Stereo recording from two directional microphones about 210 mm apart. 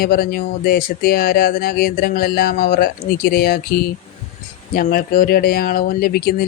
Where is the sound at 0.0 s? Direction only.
45° left (ahead or behind).